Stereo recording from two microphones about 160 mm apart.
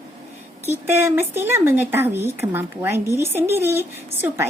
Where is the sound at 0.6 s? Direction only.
15° right (ahead or behind).